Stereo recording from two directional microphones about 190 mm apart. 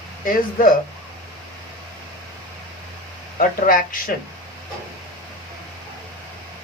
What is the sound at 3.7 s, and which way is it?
Speech, 45° left (ahead or behind).